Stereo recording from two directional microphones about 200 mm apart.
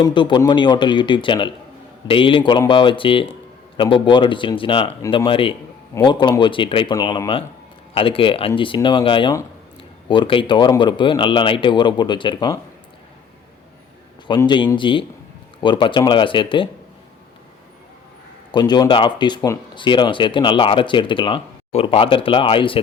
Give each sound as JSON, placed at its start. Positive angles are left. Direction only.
{"t": 0.0, "sound": "speech", "side_deg": 25}
{"t": 14.3, "sound": "speech", "side_deg": 20}
{"t": 18.5, "sound": "speech", "side_deg": 20}